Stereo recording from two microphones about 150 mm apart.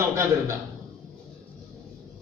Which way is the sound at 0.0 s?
20° right (ahead or behind).